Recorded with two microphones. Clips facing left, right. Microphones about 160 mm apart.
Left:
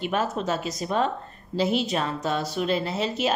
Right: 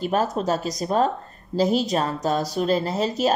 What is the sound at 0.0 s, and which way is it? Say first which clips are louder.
A woman's voice: right 3 dB; 40° right (ahead or behind).